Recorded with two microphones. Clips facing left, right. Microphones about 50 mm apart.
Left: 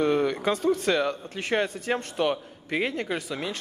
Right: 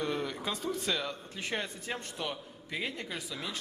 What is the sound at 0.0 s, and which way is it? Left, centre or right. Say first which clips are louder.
A man's voice: left 11 dB; left.